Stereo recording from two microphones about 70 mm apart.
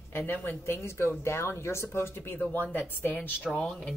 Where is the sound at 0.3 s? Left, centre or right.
Left.